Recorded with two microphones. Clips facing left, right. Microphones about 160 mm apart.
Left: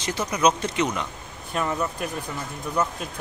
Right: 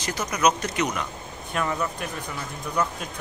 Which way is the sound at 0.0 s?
25° left (ahead or behind).